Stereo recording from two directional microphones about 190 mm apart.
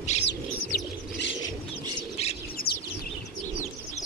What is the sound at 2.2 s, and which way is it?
Bird, 35° left (ahead or behind).